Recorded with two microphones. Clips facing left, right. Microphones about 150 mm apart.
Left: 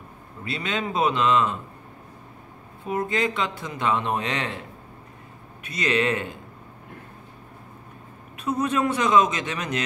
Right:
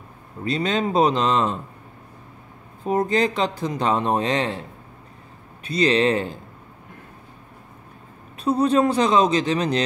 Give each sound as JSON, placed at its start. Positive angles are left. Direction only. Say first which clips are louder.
{"t": 0.4, "sound": "speech", "louder": "right 6 dB", "side_deg": -40}
{"t": 2.9, "sound": "speech", "louder": "right 5 dB", "side_deg": -40}
{"t": 5.6, "sound": "speech", "louder": "right 5 dB", "side_deg": -35}
{"t": 8.4, "sound": "speech", "louder": "right 6 dB", "side_deg": -35}